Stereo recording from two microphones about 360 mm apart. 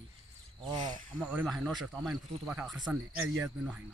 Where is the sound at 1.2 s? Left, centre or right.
Centre.